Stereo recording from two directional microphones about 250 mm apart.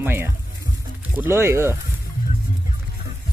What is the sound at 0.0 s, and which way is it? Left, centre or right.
Speech, centre.